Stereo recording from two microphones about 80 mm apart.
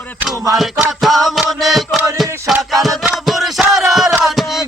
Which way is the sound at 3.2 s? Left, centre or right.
Centre.